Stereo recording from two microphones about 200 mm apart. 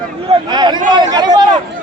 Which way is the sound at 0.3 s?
25° right (ahead or behind).